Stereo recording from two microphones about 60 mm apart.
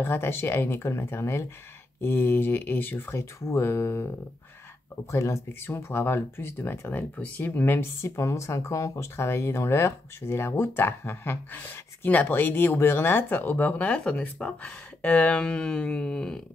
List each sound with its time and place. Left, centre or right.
0.0 s speech: left
3.1 s speech: left
3.6 s speech: left
5.1 s speech: left
7.0 s speech: left
8.0 s speech: left
8.9 s speech: left; by 16.4 s centre